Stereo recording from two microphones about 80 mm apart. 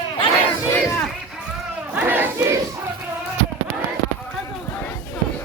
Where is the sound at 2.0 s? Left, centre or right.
Right.